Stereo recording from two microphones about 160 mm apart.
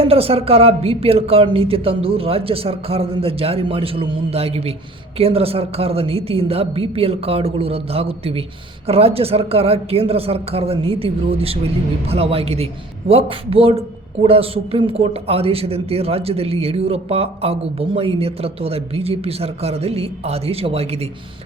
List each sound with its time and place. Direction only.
0.0 s a man's voice: 35° right (ahead or behind)